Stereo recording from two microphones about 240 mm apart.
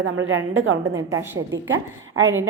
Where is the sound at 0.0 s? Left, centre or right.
Right.